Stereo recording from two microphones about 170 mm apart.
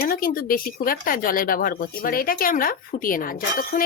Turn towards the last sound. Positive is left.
turn(degrees=55)  # may be behind; listen again after turning